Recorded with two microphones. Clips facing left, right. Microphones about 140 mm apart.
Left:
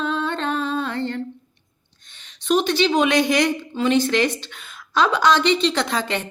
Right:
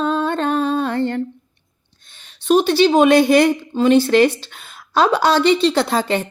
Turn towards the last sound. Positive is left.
turn(degrees=-45)  # may be behind; listen again after turning